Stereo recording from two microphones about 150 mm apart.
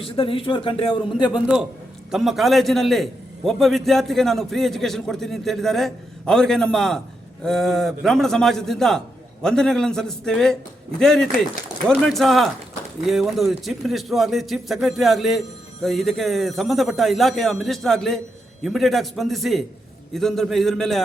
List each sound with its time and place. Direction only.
0.0 s a man's voice: 35° left (ahead or behind)
1.3 s a man's voice: 5° right (ahead or behind)